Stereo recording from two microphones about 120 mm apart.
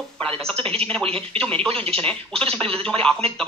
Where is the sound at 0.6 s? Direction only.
50° right (ahead or behind).